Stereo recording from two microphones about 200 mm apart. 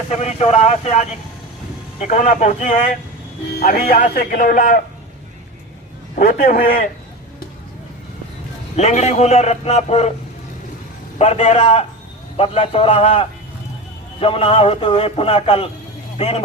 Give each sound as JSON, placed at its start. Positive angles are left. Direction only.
{"t": 0.1, "sound": "a man's voice", "side_deg": 35}
{"t": 6.1, "sound": "a man's voice", "side_deg": 45}
{"t": 8.7, "sound": "a man's voice", "side_deg": 35}
{"t": 11.2, "sound": "a man's voice", "side_deg": 30}